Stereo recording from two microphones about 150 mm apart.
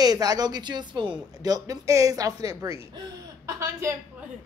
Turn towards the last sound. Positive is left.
turn(degrees=-20)  # may be behind; listen again after turning